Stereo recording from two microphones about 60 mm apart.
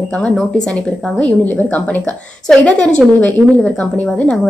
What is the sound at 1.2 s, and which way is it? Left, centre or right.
Speech, left.